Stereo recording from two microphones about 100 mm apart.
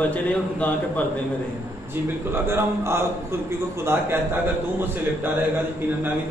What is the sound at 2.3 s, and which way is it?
Speech, 25° right (ahead or behind).